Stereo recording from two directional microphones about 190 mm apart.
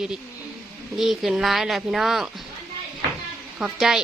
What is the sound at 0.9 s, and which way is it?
A woman's voice, centre (ahead or behind).